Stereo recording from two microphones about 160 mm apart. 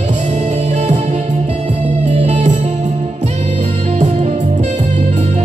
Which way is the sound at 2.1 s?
45° right (ahead or behind).